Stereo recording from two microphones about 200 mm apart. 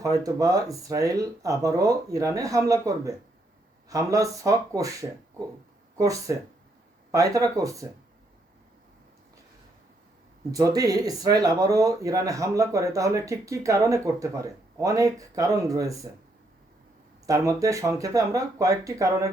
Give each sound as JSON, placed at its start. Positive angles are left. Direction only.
{"t": 0.0, "sound": "speech", "side_deg": -15}
{"t": 10.5, "sound": "speech", "side_deg": -15}
{"t": 17.2, "sound": "speech", "side_deg": -15}